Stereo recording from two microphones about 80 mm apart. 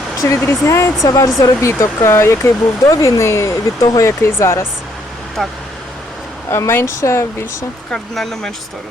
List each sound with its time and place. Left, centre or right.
0.3 s speech: left
5.4 s speech: centre
6.5 s speech: left
7.9 s speech: centre